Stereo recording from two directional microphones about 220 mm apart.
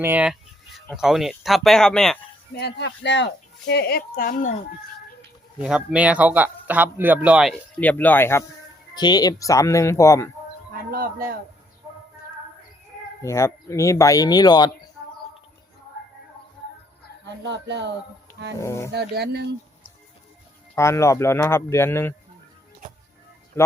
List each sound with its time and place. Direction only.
0.0 s a man's voice: 5° right (ahead or behind)
2.6 s speech: 50° left (ahead or behind)
5.5 s a man's voice: 5° right (ahead or behind)
7.8 s speech: 5° left (ahead or behind)
10.9 s a man's voice: 40° right (ahead or behind)
13.2 s speech: 15° left (ahead or behind)
17.2 s speech: 55° right (ahead or behind)
18.6 s speech: 10° left (ahead or behind)
18.9 s speech: 50° right (ahead or behind)
20.7 s speech: 10° left (ahead or behind)
23.6 s speech: 10° left (ahead or behind)